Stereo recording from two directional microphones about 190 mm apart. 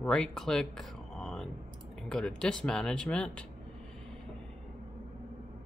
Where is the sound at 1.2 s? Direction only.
Centre (ahead or behind).